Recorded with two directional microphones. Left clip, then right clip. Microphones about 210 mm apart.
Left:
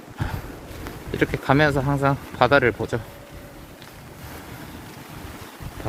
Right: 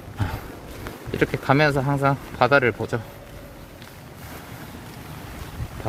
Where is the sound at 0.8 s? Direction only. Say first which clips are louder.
Even; 5° right (ahead or behind).